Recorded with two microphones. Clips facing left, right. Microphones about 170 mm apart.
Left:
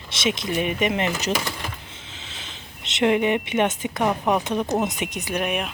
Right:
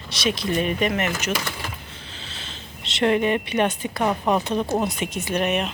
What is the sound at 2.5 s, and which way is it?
Speech, 20° left (ahead or behind).